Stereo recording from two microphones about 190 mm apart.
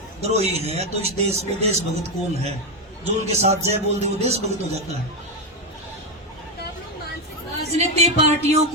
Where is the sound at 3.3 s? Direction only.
35° right (ahead or behind).